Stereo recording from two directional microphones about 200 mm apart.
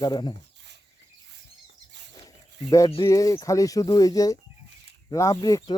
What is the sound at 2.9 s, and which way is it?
Speech, 15° left (ahead or behind).